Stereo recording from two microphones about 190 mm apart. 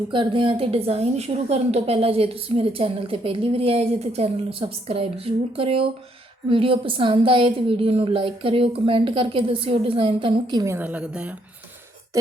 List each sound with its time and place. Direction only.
0.1 s a woman's voice: 25° right (ahead or behind); by 11.3 s 5° right (ahead or behind)